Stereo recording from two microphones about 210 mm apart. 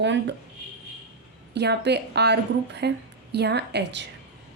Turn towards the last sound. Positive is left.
turn(degrees=-55)  # may be behind; listen again after turning